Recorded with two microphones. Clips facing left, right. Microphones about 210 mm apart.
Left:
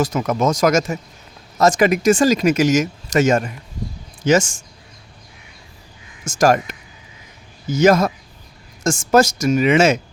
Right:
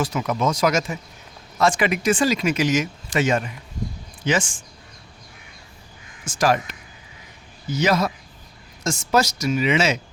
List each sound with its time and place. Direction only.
0.0 s speech: 45° left (ahead or behind)
6.2 s speech: 45° left (ahead or behind)